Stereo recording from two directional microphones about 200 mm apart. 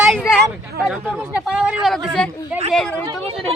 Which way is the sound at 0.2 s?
5° left (ahead or behind).